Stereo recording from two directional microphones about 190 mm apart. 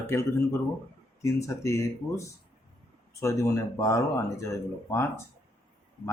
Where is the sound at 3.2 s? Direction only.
15° left (ahead or behind).